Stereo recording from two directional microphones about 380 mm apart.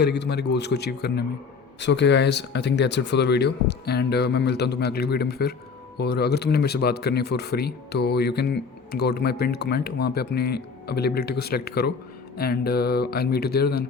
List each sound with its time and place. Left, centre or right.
0.0 s speech: left